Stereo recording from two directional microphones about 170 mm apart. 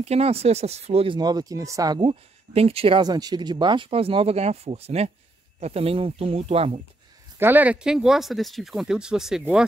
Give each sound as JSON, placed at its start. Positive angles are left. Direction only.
{"t": 0.0, "sound": "speech", "side_deg": -35}
{"t": 7.3, "sound": "speech", "side_deg": -10}